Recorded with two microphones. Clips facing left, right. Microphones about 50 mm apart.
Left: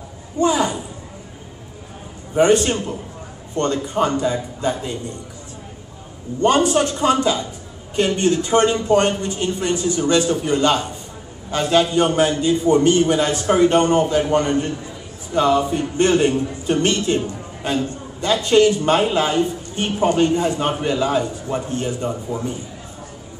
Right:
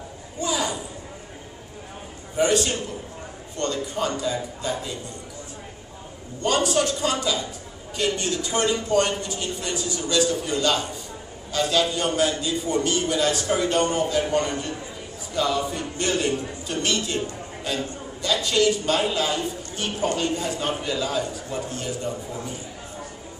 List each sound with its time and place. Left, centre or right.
0.4 s a man's voice: left
2.3 s a man's voice: left
6.4 s a man's voice: left